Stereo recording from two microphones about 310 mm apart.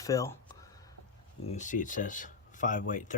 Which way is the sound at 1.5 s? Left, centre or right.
Left.